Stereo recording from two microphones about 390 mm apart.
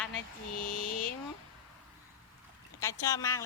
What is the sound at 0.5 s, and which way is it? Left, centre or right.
Mantra, left.